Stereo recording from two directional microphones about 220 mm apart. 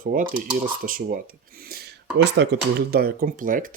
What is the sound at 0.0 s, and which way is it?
Speech, 40° right (ahead or behind).